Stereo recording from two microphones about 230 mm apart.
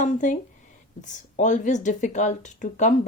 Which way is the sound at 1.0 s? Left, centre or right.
Left.